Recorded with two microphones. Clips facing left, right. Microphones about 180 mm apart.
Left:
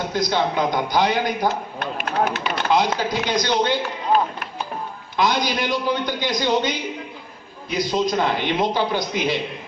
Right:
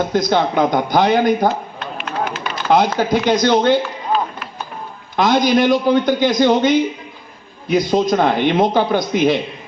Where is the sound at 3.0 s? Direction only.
50° right (ahead or behind).